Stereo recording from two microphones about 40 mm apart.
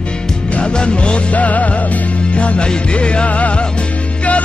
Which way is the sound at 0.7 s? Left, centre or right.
Left.